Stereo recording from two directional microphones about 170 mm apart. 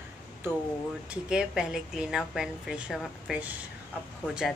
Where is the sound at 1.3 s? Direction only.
5° right (ahead or behind).